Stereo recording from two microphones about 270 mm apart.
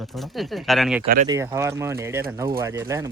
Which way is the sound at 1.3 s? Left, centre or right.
Centre.